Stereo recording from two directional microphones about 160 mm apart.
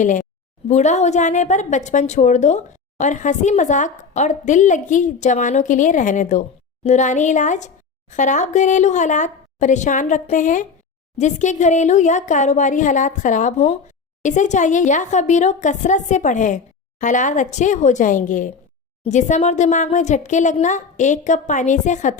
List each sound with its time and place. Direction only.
0.0 s a woman's voice: 50° left (ahead or behind)